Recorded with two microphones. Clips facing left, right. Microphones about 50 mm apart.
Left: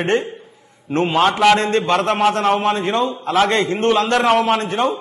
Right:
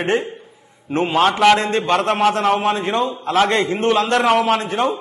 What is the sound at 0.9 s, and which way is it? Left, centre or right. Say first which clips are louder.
Speech: left 1 dB; right.